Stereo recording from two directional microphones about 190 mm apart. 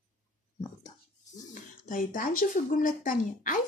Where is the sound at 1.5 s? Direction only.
45° left (ahead or behind).